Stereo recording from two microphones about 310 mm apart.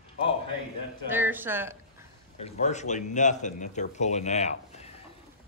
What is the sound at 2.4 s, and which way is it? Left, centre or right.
Speech, left.